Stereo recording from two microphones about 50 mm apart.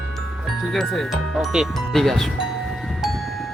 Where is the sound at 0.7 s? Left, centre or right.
Centre.